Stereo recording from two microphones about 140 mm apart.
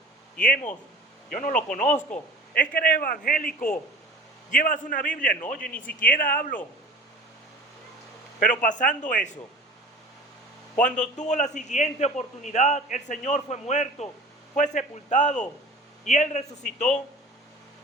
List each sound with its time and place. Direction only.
0.4 s a man's voice: 70° left (ahead or behind)
2.6 s a man's voice: 90° left
4.5 s a man's voice: 70° left (ahead or behind)
5.5 s speech: 10° left (ahead or behind)
6.0 s speech: 85° left
8.4 s a man's voice: 70° left (ahead or behind)
10.8 s a man's voice: 60° left (ahead or behind)